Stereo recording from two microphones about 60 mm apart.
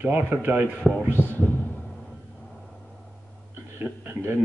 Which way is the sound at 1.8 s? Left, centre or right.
Centre.